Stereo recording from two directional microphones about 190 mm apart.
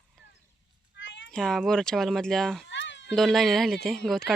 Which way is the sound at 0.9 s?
70° left (ahead or behind).